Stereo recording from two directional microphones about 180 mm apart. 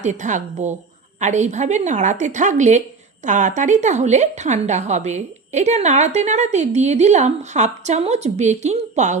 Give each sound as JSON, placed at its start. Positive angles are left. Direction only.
{"t": 0.0, "sound": "a woman's voice", "side_deg": -40}